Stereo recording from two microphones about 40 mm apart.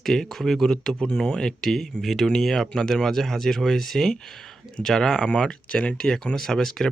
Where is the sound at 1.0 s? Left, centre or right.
Centre.